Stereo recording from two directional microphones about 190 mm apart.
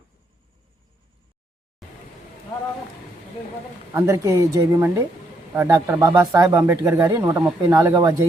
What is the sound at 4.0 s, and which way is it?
Speech, 15° right (ahead or behind).